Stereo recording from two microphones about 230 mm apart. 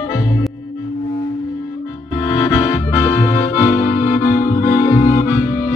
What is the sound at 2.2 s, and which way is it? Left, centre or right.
Accordion, centre.